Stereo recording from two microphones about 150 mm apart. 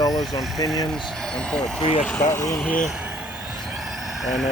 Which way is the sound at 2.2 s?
20° left (ahead or behind).